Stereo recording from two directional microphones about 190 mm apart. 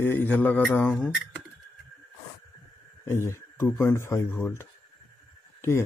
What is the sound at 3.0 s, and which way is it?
Speech, 15° left (ahead or behind).